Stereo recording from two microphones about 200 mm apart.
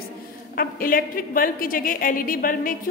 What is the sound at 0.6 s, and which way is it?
A woman's voice, 45° left (ahead or behind).